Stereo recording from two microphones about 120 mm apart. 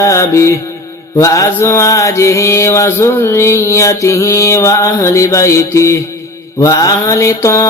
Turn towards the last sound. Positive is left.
turn(degrees=25)  # may be behind; listen again after turning